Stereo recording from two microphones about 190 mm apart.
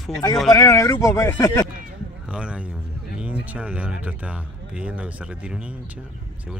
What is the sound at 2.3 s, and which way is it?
Speech, 5° right (ahead or behind).